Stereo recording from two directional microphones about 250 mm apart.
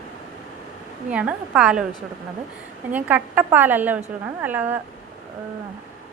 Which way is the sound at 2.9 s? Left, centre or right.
Centre.